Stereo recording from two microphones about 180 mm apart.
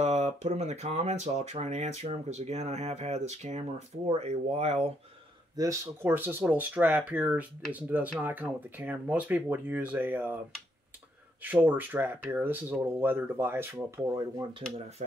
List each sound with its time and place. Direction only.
0.0 s speech: 40° right (ahead or behind)
5.6 s speech: 15° right (ahead or behind)
11.4 s speech: 10° right (ahead or behind)
15.0 s speech: 40° right (ahead or behind)